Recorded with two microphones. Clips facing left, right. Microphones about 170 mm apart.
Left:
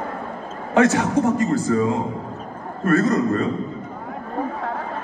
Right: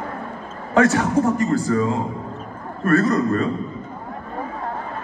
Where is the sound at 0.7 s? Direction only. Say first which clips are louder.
Even; 20° left (ahead or behind).